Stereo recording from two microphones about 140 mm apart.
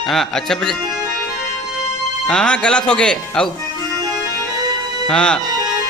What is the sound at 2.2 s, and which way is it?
Speech, 5° left (ahead or behind).